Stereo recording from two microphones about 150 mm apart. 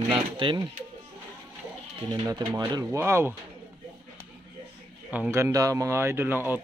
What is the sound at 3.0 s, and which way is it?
Speech, 15° right (ahead or behind).